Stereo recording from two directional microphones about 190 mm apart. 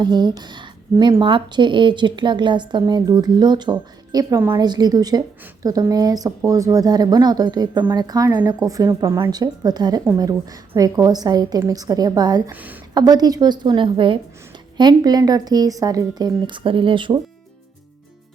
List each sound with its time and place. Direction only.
0.0 s a woman's voice: 25° right (ahead or behind)
12.5 s speech: 10° right (ahead or behind)
12.9 s a woman's voice: 20° right (ahead or behind)